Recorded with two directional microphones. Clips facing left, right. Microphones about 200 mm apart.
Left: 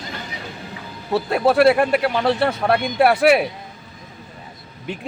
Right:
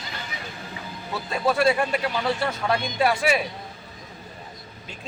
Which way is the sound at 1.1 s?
60° left (ahead or behind).